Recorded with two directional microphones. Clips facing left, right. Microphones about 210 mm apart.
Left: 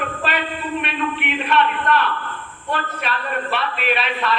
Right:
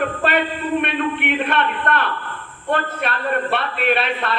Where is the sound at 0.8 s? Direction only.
55° right (ahead or behind).